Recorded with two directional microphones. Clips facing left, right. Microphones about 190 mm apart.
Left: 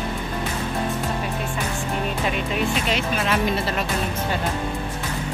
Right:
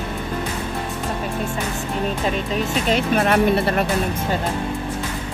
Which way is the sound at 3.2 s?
55° right (ahead or behind).